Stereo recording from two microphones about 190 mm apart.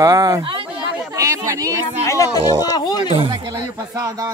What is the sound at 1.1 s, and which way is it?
Speech, 15° right (ahead or behind).